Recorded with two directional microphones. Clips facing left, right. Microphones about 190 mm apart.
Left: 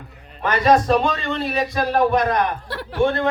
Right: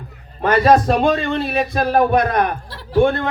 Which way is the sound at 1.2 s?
55° right (ahead or behind).